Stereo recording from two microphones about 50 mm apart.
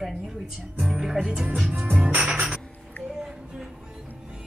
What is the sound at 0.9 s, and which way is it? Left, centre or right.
Speech, centre.